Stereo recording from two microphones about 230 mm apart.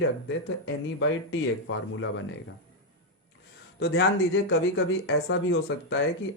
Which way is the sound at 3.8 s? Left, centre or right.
Left.